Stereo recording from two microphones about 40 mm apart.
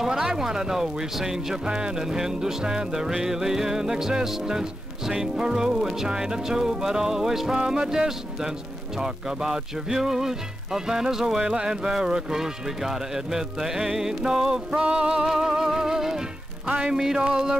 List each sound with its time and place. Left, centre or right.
0.0 s music: centre
14.7 s music: right
15.2 s music: centre
16.6 s speech: right
16.9 s music: centre